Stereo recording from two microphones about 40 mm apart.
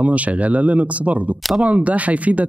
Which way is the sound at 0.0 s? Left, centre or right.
Right.